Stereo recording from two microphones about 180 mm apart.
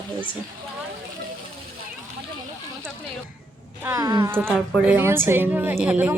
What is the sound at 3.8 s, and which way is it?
Speech, 15° right (ahead or behind).